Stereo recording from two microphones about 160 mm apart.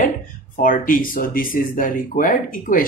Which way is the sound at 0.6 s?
60° left (ahead or behind).